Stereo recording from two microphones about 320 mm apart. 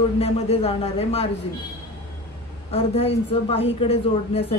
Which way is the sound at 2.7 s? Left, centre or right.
Centre.